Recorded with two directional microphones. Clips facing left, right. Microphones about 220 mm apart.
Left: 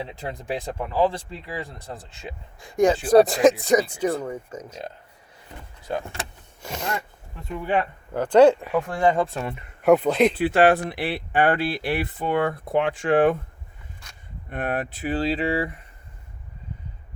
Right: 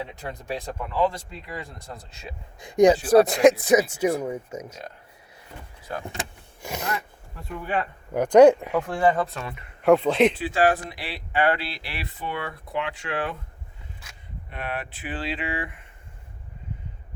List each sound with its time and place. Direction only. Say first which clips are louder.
0.0 s speech: left 2 dB; 30° left (ahead or behind)
2.6 s speech: right 3 dB; 20° right (ahead or behind)
3.1 s speech: even; centre (ahead or behind)
6.1 s vehicle: right 1 dB; 15° right (ahead or behind)
7.6 s speech: left 4 dB; 20° left (ahead or behind)
8.1 s speech: right 1 dB; 15° right (ahead or behind)
9.1 s speech: left 3 dB; 30° left (ahead or behind)
9.8 s speech: left 1 dB; 5° left (ahead or behind)
10.3 s speech: left 4 dB; 60° left (ahead or behind)
14.0 s a sound: even; 5° right (ahead or behind)
14.5 s speech: left 6 dB; 45° left (ahead or behind)